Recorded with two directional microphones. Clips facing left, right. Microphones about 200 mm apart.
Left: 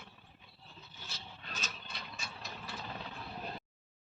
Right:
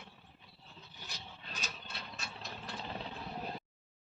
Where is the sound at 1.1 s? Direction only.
15° right (ahead or behind).